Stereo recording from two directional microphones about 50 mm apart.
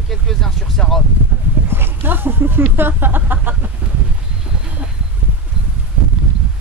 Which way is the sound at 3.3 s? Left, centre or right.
Right.